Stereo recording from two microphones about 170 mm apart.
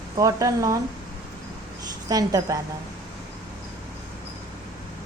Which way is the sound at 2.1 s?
20° right (ahead or behind).